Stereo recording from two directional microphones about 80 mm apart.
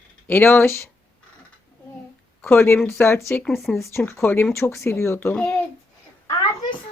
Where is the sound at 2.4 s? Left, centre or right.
Left.